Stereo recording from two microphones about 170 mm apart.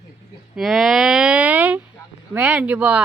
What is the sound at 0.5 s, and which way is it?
Speech, centre (ahead or behind).